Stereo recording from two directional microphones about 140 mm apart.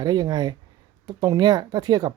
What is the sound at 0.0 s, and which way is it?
Speech, 30° right (ahead or behind).